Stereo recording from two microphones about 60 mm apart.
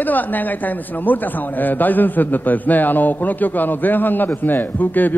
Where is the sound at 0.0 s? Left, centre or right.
Left.